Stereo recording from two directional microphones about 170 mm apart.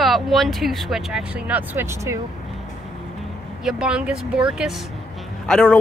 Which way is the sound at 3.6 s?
5° right (ahead or behind).